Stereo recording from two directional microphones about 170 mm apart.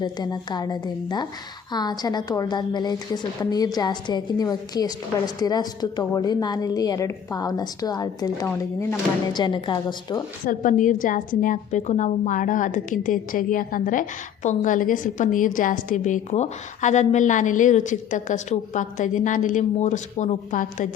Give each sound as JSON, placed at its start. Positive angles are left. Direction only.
{"t": 0.0, "sound": "a woman's voice", "side_deg": 25}
{"t": 10.4, "sound": "a woman's voice", "side_deg": 50}